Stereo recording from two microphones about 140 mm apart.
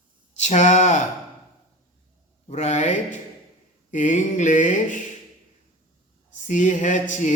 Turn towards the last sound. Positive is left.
turn(degrees=60)  # may be behind; listen again after turning